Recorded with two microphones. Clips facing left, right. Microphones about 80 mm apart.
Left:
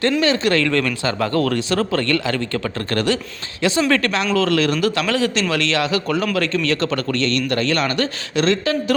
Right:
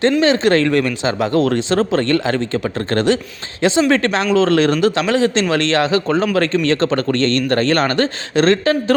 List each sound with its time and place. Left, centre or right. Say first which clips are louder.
0.2 s a man's voice: right 4 dB; right
0.7 s a man's voice: right 3 dB; centre; by 9.0 s right